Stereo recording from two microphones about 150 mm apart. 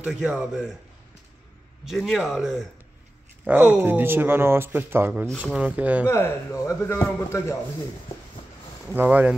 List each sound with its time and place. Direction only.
0.0 s a man's voice: 5° right (ahead or behind)
1.9 s a man's voice: centre (ahead or behind)
6.0 s a man's voice: 15° left (ahead or behind)
8.8 s speech: 10° right (ahead or behind)